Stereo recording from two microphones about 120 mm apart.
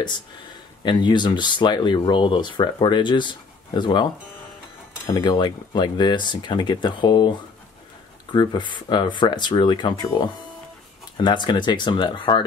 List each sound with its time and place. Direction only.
0.8 s speech: 40° left (ahead or behind)
5.2 s speech: 35° left (ahead or behind)
8.3 s speech: 40° left (ahead or behind)